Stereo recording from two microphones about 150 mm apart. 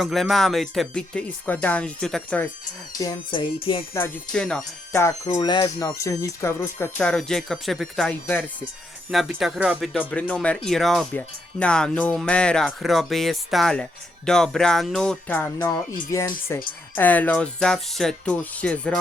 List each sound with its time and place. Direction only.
0.0 s speech: centre (ahead or behind)
3.0 s music: 30° left (ahead or behind)
4.3 s speech: 5° left (ahead or behind)
5.3 s speech: 30° left (ahead or behind)
7.0 s speech: 5° left (ahead or behind)
9.9 s speech: 10° left (ahead or behind)
16.0 s speech: 20° left (ahead or behind)